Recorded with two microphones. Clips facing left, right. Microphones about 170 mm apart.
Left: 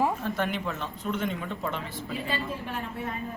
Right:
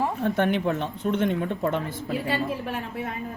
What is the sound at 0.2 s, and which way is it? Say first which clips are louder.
Speech: right 7 dB; 60° right (ahead or behind).